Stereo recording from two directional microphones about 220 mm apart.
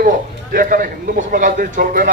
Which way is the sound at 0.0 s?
40° right (ahead or behind).